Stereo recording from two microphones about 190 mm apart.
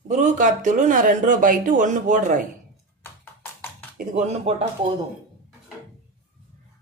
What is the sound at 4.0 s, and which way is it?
Speech, 35° right (ahead or behind).